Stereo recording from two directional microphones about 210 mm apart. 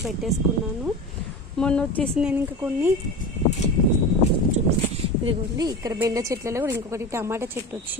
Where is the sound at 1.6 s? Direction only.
5° left (ahead or behind).